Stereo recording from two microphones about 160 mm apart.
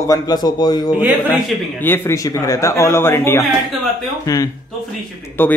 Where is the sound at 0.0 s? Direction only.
25° left (ahead or behind).